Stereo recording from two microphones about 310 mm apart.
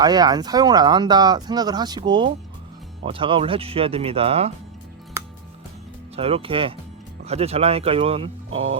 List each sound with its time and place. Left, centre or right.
0.0 s speech: centre
6.1 s speech: centre